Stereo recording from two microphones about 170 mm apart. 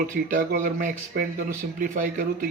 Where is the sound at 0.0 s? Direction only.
55° right (ahead or behind).